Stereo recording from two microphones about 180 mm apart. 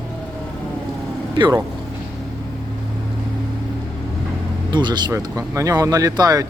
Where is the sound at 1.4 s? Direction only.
20° right (ahead or behind).